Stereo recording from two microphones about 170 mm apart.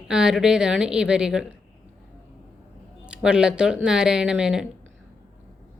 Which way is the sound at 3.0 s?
5° right (ahead or behind).